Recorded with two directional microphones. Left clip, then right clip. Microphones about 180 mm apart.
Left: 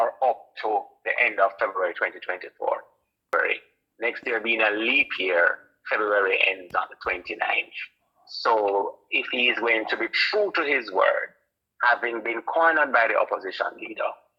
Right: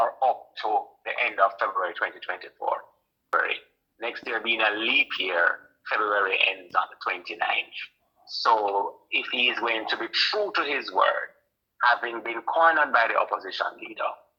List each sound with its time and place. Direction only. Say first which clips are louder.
0.0 s radio: left 1 dB; 30° left (ahead or behind)
3.3 s speech: left 1 dB; 30° left (ahead or behind)